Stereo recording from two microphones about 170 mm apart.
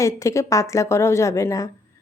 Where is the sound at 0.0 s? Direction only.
20° left (ahead or behind).